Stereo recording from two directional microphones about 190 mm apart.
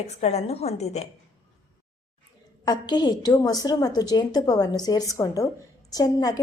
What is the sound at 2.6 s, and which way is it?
A woman's voice, 20° left (ahead or behind).